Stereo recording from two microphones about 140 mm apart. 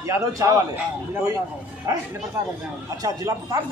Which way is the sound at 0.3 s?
25° right (ahead or behind).